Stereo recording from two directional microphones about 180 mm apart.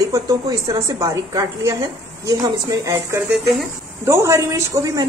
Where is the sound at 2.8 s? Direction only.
15° right (ahead or behind).